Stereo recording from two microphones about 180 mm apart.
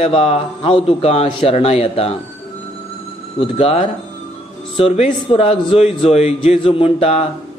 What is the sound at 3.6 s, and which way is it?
A man's voice, 35° left (ahead or behind).